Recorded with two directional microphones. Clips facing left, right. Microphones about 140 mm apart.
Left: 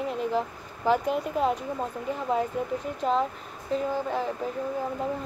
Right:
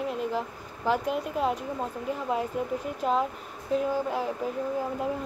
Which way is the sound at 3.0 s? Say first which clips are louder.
Left 1 dB; 5° right (ahead or behind).